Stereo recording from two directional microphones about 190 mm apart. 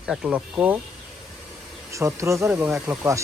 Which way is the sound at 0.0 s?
5° right (ahead or behind).